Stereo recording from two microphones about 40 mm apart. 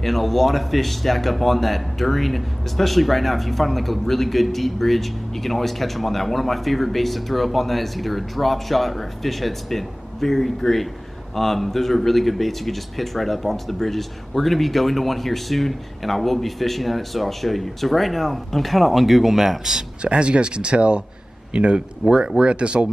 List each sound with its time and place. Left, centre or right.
0.0 s speech: centre
20.0 s speech: right